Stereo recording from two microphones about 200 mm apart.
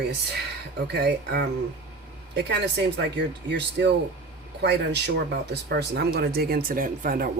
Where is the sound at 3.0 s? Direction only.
60° right (ahead or behind).